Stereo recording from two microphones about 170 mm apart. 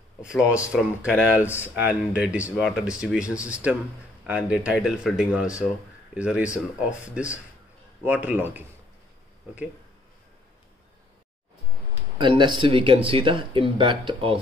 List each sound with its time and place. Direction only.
0.2 s speech: 5° right (ahead or behind)
12.2 s speech: 25° right (ahead or behind)